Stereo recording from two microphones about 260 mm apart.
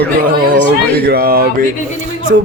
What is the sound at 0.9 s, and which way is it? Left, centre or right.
Speech, right.